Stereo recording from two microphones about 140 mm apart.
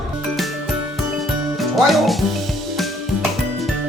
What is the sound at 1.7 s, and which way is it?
Music, centre (ahead or behind).